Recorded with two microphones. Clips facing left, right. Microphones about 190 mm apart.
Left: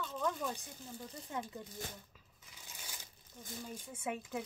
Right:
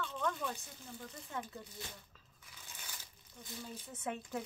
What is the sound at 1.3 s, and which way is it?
Speech, 20° left (ahead or behind).